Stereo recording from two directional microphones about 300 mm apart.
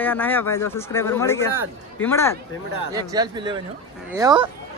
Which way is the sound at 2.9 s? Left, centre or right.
Centre.